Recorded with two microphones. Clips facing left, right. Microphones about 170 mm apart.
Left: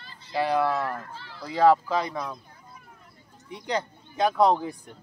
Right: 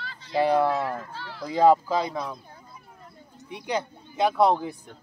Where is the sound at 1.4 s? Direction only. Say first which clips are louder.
Right 1 dB; 15° right (ahead or behind).